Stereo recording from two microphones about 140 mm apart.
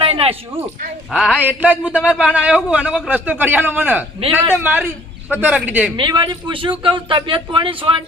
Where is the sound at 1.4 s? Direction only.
10° right (ahead or behind).